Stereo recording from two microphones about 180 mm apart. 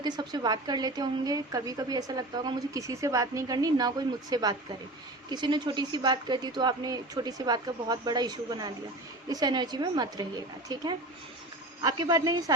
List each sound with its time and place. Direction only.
0.0 s a woman's voice: 25° right (ahead or behind)